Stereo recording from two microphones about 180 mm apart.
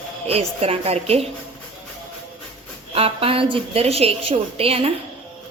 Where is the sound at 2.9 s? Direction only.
30° right (ahead or behind).